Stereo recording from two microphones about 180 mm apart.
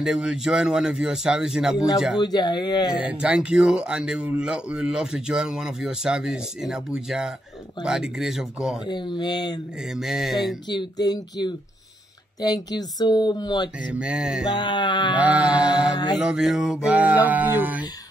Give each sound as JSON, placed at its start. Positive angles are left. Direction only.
{"t": 0.0, "sound": "speech", "side_deg": -5}
{"t": 2.2, "sound": "speech", "side_deg": 25}
{"t": 2.9, "sound": "speech", "side_deg": -5}
{"t": 8.8, "sound": "speech", "side_deg": 25}
{"t": 9.9, "sound": "speech", "side_deg": 0}
{"t": 10.7, "sound": "speech", "side_deg": 25}
{"t": 13.8, "sound": "speech", "side_deg": -5}
{"t": 14.5, "sound": "speech", "side_deg": 25}
{"t": 15.1, "sound": "music", "side_deg": -10}
{"t": 16.2, "sound": "speech", "side_deg": -5}
{"t": 16.8, "sound": "music", "side_deg": -10}